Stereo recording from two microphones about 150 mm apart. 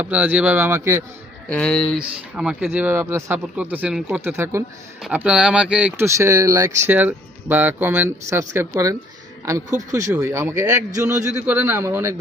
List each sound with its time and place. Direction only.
0.0 s speech: 10° right (ahead or behind)
1.5 s speech: 5° left (ahead or behind)
6.1 s speech: 20° right (ahead or behind)